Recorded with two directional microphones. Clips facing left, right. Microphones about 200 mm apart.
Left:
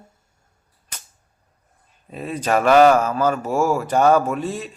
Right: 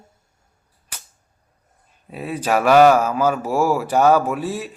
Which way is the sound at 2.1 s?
10° right (ahead or behind).